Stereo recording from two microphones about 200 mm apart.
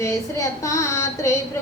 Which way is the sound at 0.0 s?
15° left (ahead or behind).